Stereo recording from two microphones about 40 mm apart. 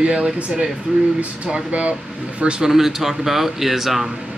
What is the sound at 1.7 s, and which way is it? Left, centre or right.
Speech, right.